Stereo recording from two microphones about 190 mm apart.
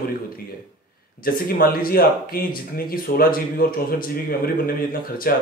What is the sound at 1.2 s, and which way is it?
Speech, 50° left (ahead or behind).